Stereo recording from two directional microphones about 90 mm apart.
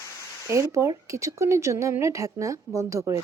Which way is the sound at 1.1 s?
35° right (ahead or behind).